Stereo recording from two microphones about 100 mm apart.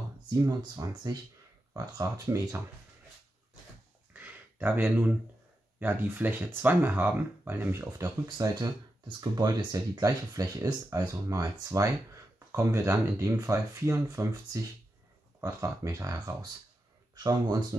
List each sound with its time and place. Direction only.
0.5 s speech: 40° right (ahead or behind)
4.1 s a sound: 20° right (ahead or behind)
5.8 s speech: 20° right (ahead or behind)
8.5 s speech: 45° right (ahead or behind)